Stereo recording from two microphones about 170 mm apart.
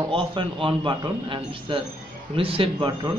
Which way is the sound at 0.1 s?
30° right (ahead or behind).